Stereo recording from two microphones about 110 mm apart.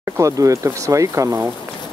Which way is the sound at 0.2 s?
30° right (ahead or behind).